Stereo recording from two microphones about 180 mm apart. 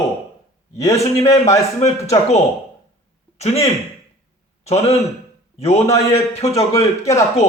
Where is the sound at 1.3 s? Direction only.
20° left (ahead or behind).